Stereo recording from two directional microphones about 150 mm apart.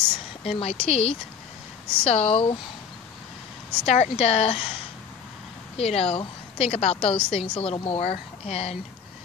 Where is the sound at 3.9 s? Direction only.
45° left (ahead or behind).